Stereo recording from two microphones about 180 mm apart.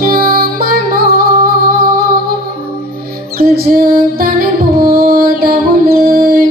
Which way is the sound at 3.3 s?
55° right (ahead or behind).